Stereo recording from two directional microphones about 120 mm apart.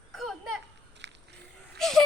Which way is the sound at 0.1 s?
Centre (ahead or behind).